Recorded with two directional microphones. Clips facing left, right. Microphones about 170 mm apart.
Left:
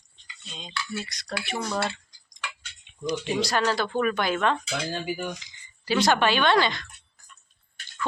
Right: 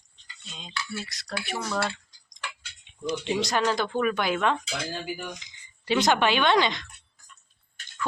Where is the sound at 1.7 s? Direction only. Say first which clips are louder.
Even; 20° left (ahead or behind).